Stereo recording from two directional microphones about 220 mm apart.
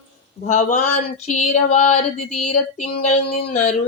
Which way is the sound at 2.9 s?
30° left (ahead or behind).